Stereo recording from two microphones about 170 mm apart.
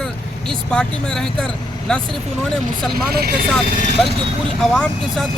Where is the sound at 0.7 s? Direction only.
5° left (ahead or behind).